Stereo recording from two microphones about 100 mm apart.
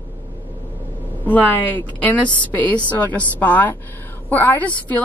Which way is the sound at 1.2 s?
20° left (ahead or behind).